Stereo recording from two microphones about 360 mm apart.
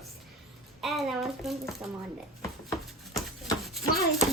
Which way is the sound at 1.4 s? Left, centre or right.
Centre.